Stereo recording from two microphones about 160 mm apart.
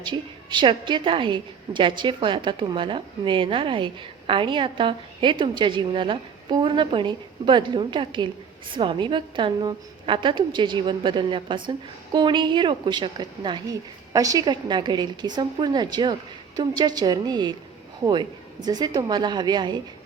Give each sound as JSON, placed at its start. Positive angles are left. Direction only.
{"t": 0.0, "sound": "a woman's voice", "side_deg": -30}